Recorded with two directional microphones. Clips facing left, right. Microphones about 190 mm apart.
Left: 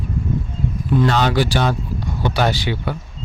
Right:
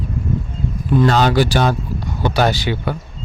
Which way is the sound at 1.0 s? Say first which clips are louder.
Right 4 dB; 40° right (ahead or behind).